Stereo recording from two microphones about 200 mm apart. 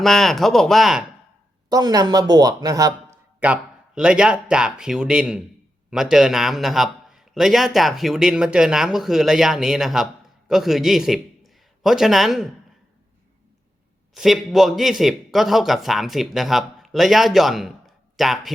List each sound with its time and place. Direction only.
0.0 s a man's voice: centre (ahead or behind)
1.7 s speech: 20° right (ahead or behind)
3.4 s a man's voice: 5° right (ahead or behind)
14.1 s a man's voice: centre (ahead or behind)